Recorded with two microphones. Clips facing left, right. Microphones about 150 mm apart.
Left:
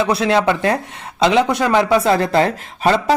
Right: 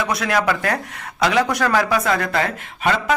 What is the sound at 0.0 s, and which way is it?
Speech, 30° left (ahead or behind).